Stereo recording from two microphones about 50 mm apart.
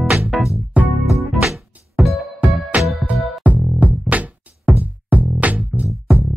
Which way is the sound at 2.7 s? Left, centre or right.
Right.